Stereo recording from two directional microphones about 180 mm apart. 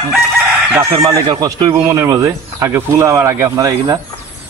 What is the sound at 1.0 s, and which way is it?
Speech, 20° right (ahead or behind).